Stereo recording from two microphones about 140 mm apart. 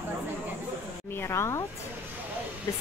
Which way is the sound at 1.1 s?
20° left (ahead or behind).